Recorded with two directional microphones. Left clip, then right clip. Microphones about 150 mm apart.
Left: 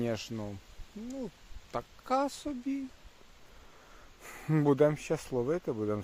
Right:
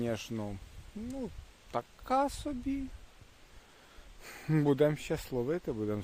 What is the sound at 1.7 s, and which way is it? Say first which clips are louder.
Speech: even; 20° right (ahead or behind).